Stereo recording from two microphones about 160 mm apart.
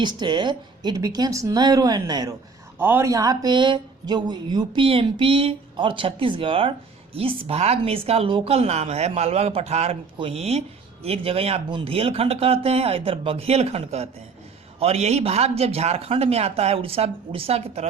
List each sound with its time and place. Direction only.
0.0 s speech: 30° right (ahead or behind)
2.7 s speech: 15° right (ahead or behind); by 17.8 s 40° right (ahead or behind)